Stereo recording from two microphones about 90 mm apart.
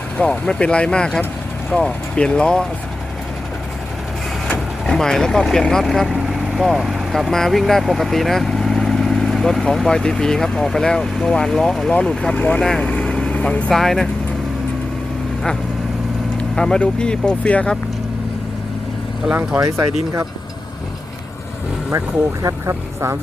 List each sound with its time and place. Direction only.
0.2 s speech: 10° left (ahead or behind)
4.9 s speech: 5° left (ahead or behind)
16.6 s speech: 10° left (ahead or behind)
19.5 s speech: 35° right (ahead or behind)
22.4 s vehicle: 30° right (ahead or behind)